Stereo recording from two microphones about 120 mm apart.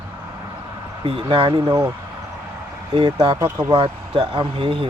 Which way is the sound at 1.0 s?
45° right (ahead or behind).